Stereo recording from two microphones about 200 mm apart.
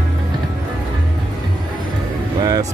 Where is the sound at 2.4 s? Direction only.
20° right (ahead or behind).